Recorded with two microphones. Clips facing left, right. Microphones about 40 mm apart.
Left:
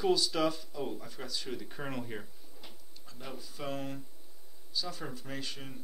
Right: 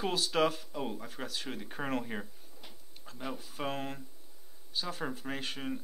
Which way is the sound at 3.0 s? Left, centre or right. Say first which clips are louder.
Right 5 dB; right.